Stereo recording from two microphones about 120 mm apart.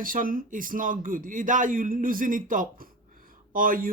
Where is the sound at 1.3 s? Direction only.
90° right.